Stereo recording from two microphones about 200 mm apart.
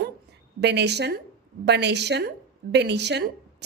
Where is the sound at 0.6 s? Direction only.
60° right (ahead or behind).